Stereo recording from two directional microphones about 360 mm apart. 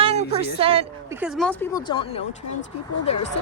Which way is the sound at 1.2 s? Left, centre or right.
Centre.